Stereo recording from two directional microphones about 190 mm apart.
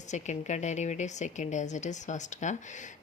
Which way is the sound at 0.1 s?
40° left (ahead or behind).